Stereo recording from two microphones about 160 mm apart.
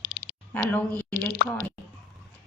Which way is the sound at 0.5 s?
10° left (ahead or behind).